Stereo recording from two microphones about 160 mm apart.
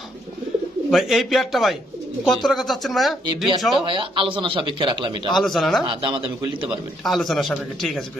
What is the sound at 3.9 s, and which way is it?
A man's voice, 30° right (ahead or behind).